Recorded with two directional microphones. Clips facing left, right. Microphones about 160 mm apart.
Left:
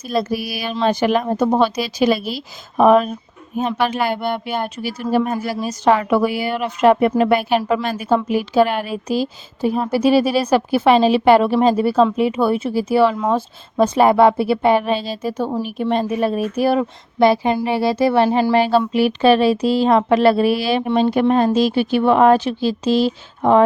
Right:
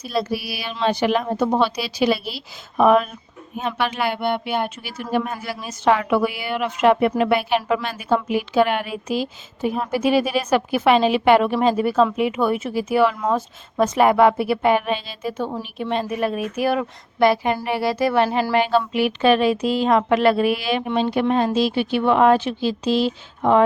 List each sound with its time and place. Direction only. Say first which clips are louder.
0.0 s a woman's voice: left 3 dB; 50° left (ahead or behind)